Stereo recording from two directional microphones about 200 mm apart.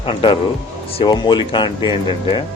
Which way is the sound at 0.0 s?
25° left (ahead or behind).